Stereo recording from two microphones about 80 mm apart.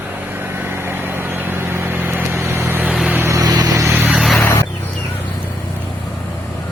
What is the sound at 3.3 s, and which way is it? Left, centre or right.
Vehicle, right.